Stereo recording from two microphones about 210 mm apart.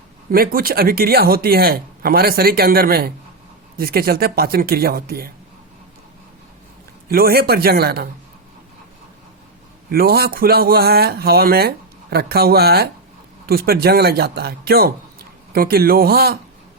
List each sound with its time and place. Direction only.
0.3 s speech: 45° right (ahead or behind)
7.1 s speech: 45° right (ahead or behind)
9.9 s speech: 45° right (ahead or behind)